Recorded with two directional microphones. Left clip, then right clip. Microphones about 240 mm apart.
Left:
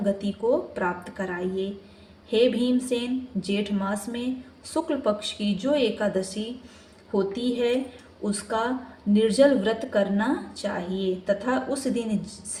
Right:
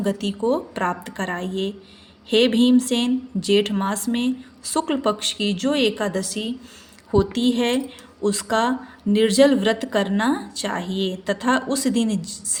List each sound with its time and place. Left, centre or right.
0.0 s speech: right